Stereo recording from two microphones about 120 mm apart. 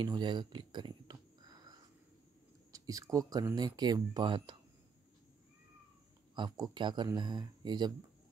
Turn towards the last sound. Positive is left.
turn(degrees=-35)  # may be behind; listen again after turning